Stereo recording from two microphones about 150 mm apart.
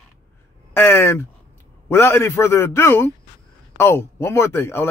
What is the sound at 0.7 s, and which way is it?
Speech, 15° left (ahead or behind).